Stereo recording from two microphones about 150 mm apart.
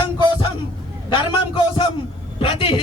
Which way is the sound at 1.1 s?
30° left (ahead or behind).